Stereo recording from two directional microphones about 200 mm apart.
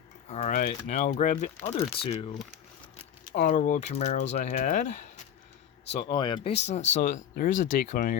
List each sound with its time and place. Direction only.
0.3 s speech: 35° left (ahead or behind)
5.9 s speech: 30° left (ahead or behind); by 8.1 s 45° left (ahead or behind)